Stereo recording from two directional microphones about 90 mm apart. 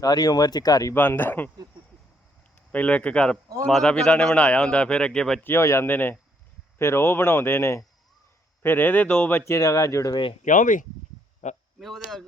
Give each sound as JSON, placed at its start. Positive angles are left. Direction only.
{"t": 0.0, "sound": "speech", "side_deg": 45}
{"t": 0.9, "sound": "speech", "side_deg": 20}
{"t": 2.7, "sound": "a man's voice", "side_deg": 15}
{"t": 5.4, "sound": "speech", "side_deg": 30}
{"t": 9.3, "sound": "speech", "side_deg": 30}
{"t": 11.8, "sound": "speech", "side_deg": 0}